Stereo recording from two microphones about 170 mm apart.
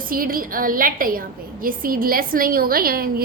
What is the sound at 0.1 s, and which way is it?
A woman's voice, 55° right (ahead or behind).